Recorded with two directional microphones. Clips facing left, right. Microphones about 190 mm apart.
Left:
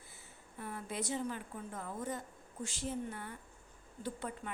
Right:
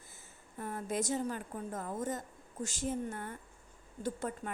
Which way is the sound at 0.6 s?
45° right (ahead or behind).